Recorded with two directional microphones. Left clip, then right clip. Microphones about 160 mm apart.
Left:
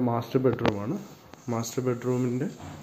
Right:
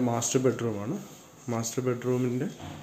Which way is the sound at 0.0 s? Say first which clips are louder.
Left 1 dB; centre (ahead or behind).